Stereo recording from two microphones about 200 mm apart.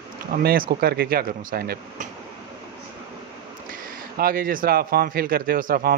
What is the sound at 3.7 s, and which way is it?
Speech, 45° right (ahead or behind).